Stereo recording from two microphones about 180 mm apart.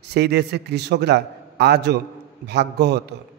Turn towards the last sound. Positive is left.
turn(degrees=-70)  # may be behind; listen again after turning